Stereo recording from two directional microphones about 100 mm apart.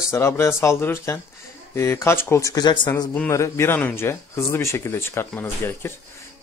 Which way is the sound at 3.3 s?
30° left (ahead or behind).